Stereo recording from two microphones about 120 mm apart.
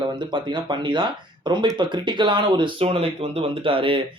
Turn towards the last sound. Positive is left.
turn(degrees=-45)  # may be behind; listen again after turning